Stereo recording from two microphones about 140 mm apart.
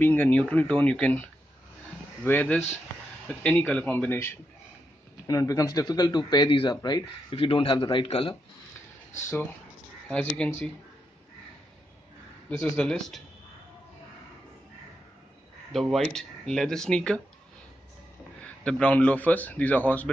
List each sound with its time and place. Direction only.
0.0 s a man's voice: 15° left (ahead or behind); by 8.4 s 45° left (ahead or behind)
10.0 s speech: 5° left (ahead or behind)
12.7 s a man's voice: 5° left (ahead or behind)
15.7 s speech: centre (ahead or behind)
18.6 s a man's voice: 10° left (ahead or behind)